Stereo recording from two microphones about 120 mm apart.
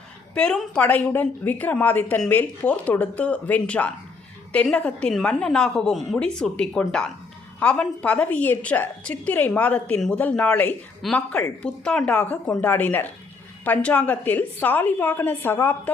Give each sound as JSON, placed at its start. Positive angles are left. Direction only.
{"t": 0.3, "sound": "a woman's voice", "side_deg": 5}
{"t": 11.0, "sound": "a woman's voice", "side_deg": 0}